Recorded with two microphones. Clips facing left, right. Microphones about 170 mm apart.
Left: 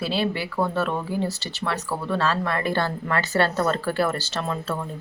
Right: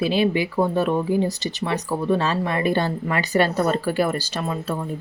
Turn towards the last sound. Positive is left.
turn(degrees=-10)  # may be behind; listen again after turning